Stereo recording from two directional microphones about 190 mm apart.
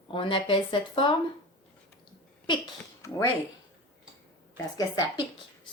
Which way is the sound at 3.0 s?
15° left (ahead or behind).